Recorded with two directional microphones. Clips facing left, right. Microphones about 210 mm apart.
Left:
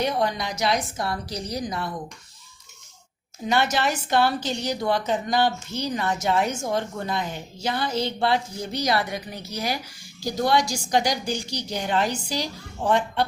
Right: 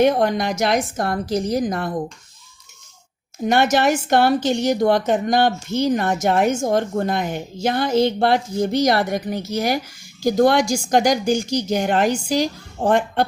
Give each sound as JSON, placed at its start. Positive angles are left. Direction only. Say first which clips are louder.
{"t": 0.0, "sound": "a woman's voice", "louder": "right 8 dB", "side_deg": -50}
{"t": 3.4, "sound": "a woman's voice", "louder": "right 6 dB", "side_deg": -50}